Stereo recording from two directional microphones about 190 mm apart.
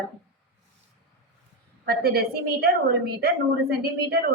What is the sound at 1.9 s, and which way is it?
A woman's voice, 55° right (ahead or behind).